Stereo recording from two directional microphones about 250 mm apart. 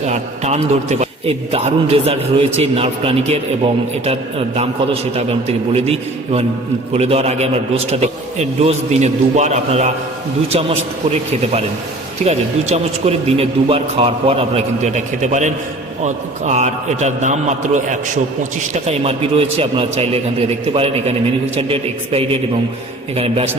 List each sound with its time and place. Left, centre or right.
0.1 s a man's voice: right